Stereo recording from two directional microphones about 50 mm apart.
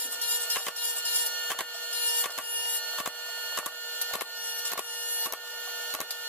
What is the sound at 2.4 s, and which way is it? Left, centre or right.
Printer, left.